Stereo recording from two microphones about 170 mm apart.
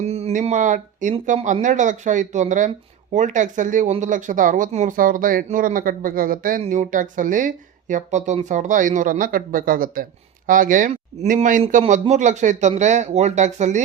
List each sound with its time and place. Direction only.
0.0 s speech: 40° right (ahead or behind); by 6.6 s 55° right (ahead or behind)
6.6 s speech: 45° right (ahead or behind)
11.8 s speech: 40° right (ahead or behind)